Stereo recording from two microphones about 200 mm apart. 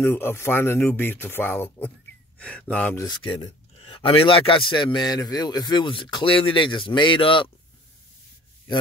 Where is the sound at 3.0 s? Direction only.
25° left (ahead or behind).